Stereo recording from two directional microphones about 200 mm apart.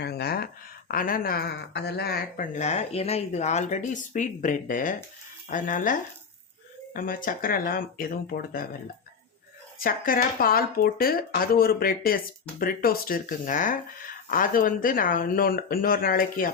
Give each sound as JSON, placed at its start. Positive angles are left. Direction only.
{"t": 0.0, "sound": "a sound", "side_deg": 50}
{"t": 0.9, "sound": "speech", "side_deg": 45}
{"t": 9.8, "sound": "speech", "side_deg": 45}